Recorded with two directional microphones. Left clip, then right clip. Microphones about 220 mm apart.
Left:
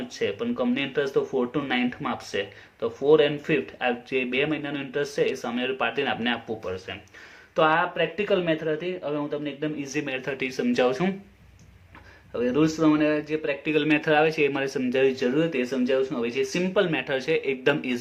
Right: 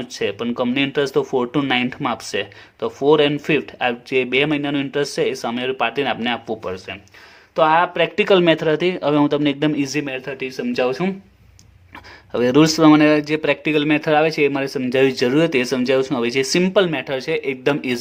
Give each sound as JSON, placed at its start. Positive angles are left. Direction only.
{"t": 0.1, "sound": "speech", "side_deg": -40}
{"t": 12.3, "sound": "speech", "side_deg": -50}